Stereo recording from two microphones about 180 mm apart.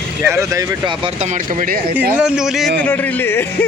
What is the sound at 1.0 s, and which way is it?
Speech, 40° right (ahead or behind).